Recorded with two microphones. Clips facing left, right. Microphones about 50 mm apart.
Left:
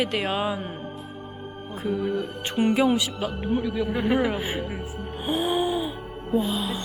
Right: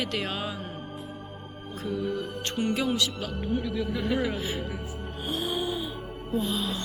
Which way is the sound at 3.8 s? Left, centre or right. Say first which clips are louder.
Left 5 dB; left.